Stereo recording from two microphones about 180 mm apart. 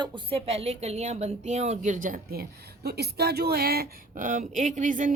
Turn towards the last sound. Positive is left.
turn(degrees=-45)  # may be behind; listen again after turning